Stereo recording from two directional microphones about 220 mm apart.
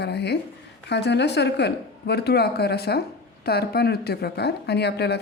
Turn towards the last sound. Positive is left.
turn(degrees=50)  # may be behind; listen again after turning